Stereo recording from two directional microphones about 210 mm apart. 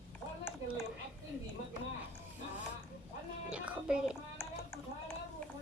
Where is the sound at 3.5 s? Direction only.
5° right (ahead or behind).